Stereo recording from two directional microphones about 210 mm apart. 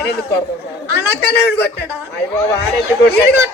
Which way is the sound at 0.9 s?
50° left (ahead or behind).